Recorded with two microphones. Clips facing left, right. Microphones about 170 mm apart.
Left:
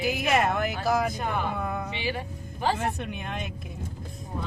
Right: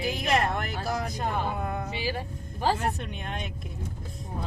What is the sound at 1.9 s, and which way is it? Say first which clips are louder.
Speech: even; 40° right (ahead or behind).